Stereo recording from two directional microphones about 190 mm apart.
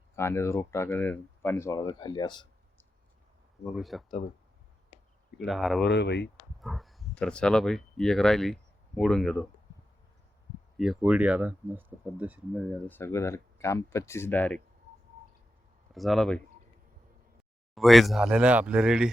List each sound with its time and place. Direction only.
0.2 s speech: 15° left (ahead or behind)
3.7 s speech: centre (ahead or behind)
5.4 s speech: centre (ahead or behind)
5.8 s speech: 65° left (ahead or behind)
6.6 s speech: centre (ahead or behind)
10.8 s speech: 5° right (ahead or behind)
12.9 s speech: 15° left (ahead or behind)
15.9 s speech: centre (ahead or behind)
17.7 s speech: centre (ahead or behind)